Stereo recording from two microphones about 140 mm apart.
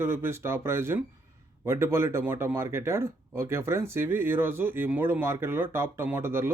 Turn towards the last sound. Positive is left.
turn(degrees=-15)  # may be behind; listen again after turning